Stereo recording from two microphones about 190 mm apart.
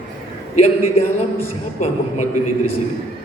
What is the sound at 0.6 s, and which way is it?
A man's voice, 35° left (ahead or behind).